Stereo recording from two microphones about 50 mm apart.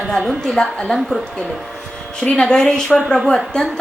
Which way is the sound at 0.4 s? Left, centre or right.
Centre.